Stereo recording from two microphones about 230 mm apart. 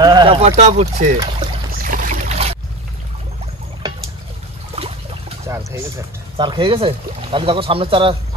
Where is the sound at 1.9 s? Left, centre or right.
Right.